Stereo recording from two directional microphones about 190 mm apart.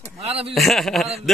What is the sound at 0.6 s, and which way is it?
Speech, centre (ahead or behind).